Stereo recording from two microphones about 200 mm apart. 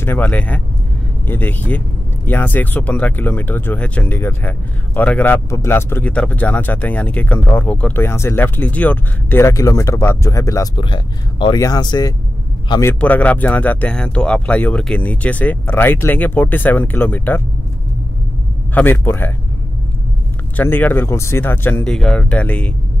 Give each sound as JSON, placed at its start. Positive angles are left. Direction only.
{"t": 0.0, "sound": "a man's voice", "side_deg": 10}
{"t": 13.0, "sound": "speech", "side_deg": 5}
{"t": 18.8, "sound": "speech", "side_deg": 10}
{"t": 20.5, "sound": "speech", "side_deg": 10}